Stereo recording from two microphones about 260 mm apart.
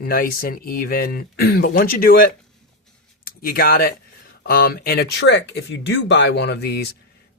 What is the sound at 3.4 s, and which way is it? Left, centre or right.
Speech, left.